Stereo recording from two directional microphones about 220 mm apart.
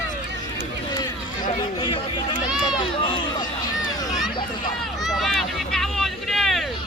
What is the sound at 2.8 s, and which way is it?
Run, 20° left (ahead or behind).